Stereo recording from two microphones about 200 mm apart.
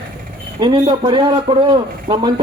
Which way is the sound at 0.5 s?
20° right (ahead or behind).